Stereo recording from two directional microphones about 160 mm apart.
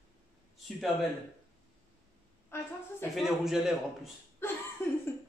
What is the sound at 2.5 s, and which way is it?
Speech, 15° left (ahead or behind).